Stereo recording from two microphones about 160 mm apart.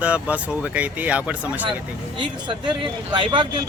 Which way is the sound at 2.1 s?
30° right (ahead or behind).